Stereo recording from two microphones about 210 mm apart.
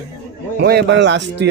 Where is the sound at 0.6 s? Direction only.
50° right (ahead or behind).